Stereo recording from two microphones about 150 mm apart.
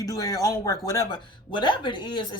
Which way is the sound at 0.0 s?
25° left (ahead or behind).